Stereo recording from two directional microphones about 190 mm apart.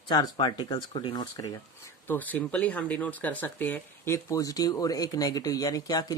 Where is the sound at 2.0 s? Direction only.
10° left (ahead or behind).